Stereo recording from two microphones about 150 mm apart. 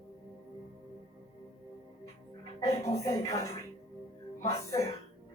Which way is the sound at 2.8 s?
20° left (ahead or behind).